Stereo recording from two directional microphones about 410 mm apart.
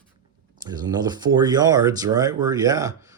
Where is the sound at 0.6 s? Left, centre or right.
Centre.